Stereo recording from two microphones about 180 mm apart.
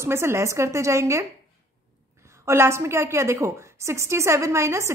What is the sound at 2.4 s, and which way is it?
A woman's voice, 15° right (ahead or behind).